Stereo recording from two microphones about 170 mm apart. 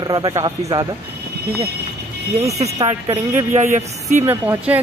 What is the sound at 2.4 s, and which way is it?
Speech, 40° right (ahead or behind).